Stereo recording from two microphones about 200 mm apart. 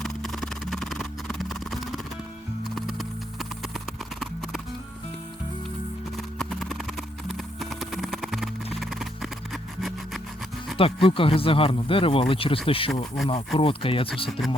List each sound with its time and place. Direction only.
0.0 s music: centre (ahead or behind)
2.6 s clip-clop: centre (ahead or behind)
4.2 s music: centre (ahead or behind)
6.1 s music: 5° left (ahead or behind)
10.8 s speech: 25° left (ahead or behind)